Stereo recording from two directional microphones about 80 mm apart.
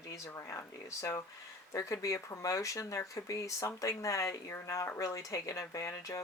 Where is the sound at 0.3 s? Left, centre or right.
Left.